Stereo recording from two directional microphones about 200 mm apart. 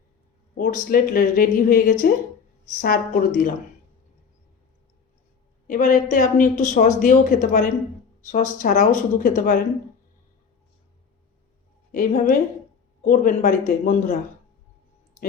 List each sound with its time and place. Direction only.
0.5 s speech: 40° left (ahead or behind)
5.6 s speech: 40° left (ahead or behind)
11.9 s speech: 40° left (ahead or behind)